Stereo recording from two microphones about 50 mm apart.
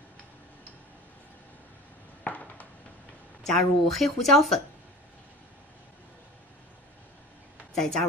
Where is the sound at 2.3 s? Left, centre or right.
Left.